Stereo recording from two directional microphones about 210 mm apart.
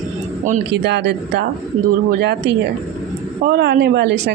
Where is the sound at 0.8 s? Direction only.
55° right (ahead or behind).